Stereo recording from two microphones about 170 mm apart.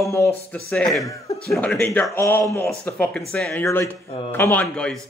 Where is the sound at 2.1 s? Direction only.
15° left (ahead or behind).